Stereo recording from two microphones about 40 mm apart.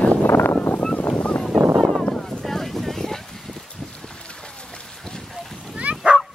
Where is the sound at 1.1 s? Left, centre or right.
Left.